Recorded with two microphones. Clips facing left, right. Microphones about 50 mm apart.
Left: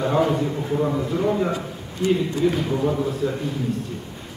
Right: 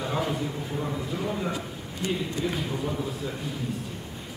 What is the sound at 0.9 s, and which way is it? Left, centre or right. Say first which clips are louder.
Speech: left 9 dB; centre.